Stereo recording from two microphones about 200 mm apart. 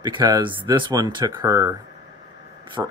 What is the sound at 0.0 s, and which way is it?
Speech, 20° right (ahead or behind).